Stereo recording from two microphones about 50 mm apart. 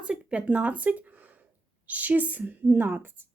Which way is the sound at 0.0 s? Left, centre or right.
Right.